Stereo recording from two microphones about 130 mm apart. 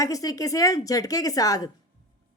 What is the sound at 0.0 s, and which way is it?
A woman's voice, 25° left (ahead or behind).